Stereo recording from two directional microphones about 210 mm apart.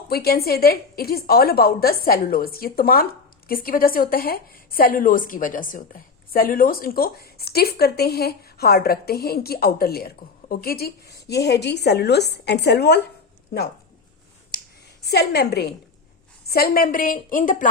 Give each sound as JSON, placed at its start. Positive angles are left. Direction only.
{"t": 0.1, "sound": "a woman's voice", "side_deg": 50}
{"t": 15.0, "sound": "a woman's voice", "side_deg": 50}